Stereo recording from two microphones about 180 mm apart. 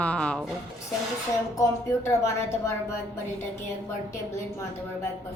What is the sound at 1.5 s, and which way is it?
Speech, 15° left (ahead or behind).